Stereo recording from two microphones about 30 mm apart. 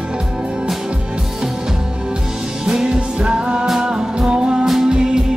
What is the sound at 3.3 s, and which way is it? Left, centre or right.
Music, right.